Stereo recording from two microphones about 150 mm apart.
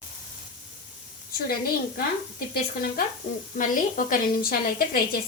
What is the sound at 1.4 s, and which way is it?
Speech, 80° left.